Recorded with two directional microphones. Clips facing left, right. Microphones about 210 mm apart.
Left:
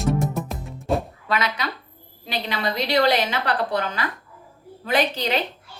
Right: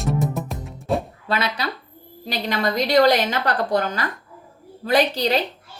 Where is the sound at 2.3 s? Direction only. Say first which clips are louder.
Right 3 dB; 45° right (ahead or behind).